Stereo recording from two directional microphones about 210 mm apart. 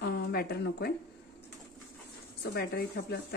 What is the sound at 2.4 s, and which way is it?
Speech, 45° left (ahead or behind).